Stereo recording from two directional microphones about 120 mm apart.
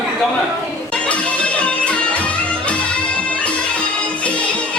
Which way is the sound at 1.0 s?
10° left (ahead or behind).